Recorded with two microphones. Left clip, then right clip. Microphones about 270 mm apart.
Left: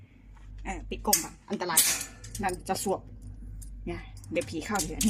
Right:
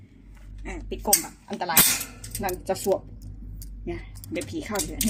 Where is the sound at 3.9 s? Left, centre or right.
Left.